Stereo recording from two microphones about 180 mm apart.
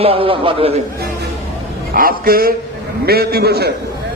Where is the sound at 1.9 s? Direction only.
55° right (ahead or behind).